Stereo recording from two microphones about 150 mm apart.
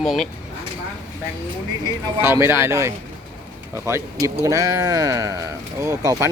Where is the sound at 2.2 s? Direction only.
15° right (ahead or behind).